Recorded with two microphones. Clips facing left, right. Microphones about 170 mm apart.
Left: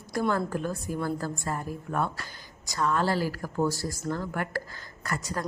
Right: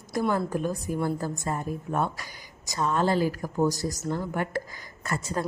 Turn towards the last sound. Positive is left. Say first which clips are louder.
# right 3 dB
turn(degrees=-25)  # may be behind; listen again after turning